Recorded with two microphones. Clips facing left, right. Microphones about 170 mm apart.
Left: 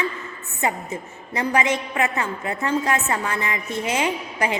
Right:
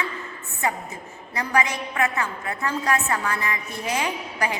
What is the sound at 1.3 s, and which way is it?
A woman's voice, 25° left (ahead or behind).